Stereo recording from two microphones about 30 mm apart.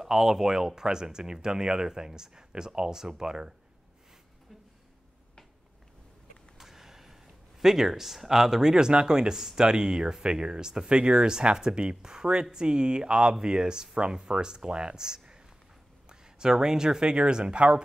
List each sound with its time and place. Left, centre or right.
0.0 s speech: centre
6.6 s a sound: centre
7.6 s speech: centre; by 17.8 s right